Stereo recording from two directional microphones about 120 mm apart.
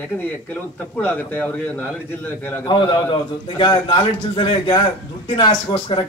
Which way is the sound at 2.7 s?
40° left (ahead or behind).